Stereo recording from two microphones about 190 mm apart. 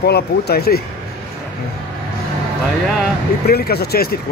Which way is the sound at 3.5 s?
55° left (ahead or behind).